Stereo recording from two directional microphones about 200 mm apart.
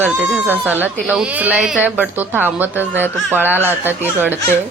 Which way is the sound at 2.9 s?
10° left (ahead or behind).